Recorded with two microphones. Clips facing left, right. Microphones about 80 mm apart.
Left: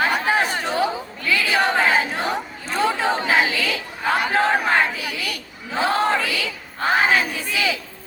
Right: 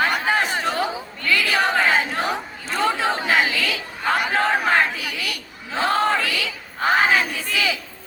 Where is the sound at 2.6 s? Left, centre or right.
Centre.